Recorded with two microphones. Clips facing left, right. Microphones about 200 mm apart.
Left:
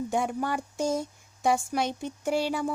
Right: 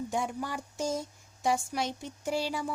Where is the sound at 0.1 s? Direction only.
60° left (ahead or behind).